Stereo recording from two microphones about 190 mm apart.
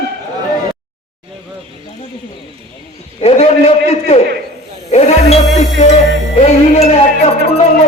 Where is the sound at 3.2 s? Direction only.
35° left (ahead or behind).